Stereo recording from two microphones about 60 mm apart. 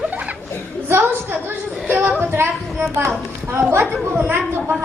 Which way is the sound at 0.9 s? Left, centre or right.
Right.